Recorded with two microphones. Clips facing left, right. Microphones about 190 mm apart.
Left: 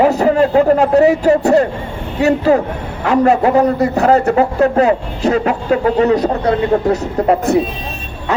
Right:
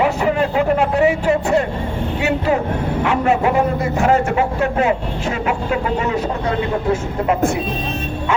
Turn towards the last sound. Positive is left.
turn(degrees=40)  # may be behind; listen again after turning